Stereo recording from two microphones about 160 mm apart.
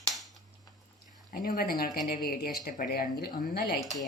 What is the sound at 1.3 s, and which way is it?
Speech, 65° left (ahead or behind).